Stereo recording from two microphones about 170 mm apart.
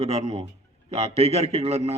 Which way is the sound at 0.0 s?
40° right (ahead or behind).